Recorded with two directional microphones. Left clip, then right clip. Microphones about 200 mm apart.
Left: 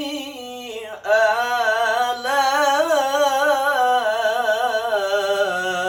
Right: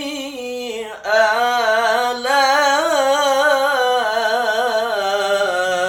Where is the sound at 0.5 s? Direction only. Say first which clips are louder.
Right 5 dB; 10° right (ahead or behind).